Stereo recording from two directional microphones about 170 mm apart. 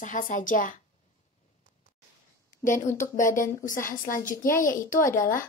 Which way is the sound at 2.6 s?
50° left (ahead or behind).